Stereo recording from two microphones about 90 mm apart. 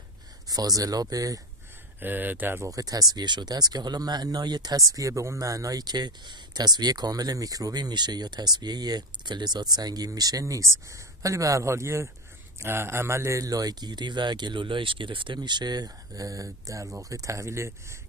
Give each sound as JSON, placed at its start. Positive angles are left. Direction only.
{"t": 0.5, "sound": "speech", "side_deg": -45}
{"t": 2.0, "sound": "speech", "side_deg": -20}
{"t": 2.6, "sound": "speech", "side_deg": -40}